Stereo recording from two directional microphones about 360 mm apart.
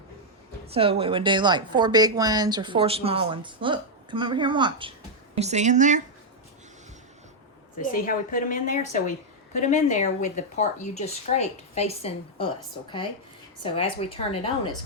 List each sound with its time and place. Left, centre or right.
0.7 s speech: centre
7.8 s a woman's voice: left
13.6 s a woman's voice: centre